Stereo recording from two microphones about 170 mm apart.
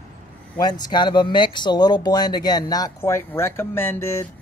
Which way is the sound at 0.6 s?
25° left (ahead or behind).